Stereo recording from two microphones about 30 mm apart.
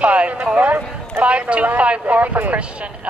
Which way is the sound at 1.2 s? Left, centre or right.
Right.